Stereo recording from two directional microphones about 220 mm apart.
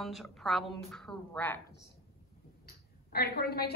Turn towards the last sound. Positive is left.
turn(degrees=45)  # may be behind; listen again after turning